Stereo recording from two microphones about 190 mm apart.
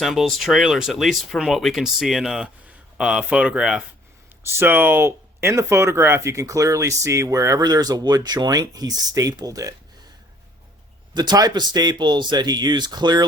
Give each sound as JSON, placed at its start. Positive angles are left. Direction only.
{"t": 0.0, "sound": "speech", "side_deg": 0}
{"t": 11.1, "sound": "speech", "side_deg": -20}